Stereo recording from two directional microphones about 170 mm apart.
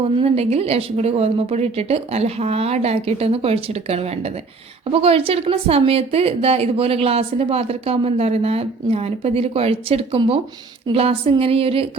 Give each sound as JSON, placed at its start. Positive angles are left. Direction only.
{"t": 0.2, "sound": "speech", "side_deg": -35}